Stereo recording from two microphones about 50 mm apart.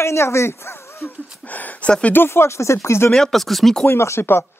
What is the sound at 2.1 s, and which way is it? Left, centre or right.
Speech, left.